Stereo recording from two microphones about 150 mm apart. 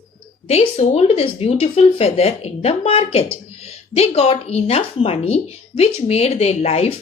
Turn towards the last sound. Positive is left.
turn(degrees=45)  # may be behind; listen again after turning